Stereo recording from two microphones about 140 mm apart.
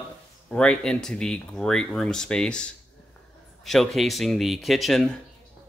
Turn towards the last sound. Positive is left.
turn(degrees=5)  # may be behind; listen again after turning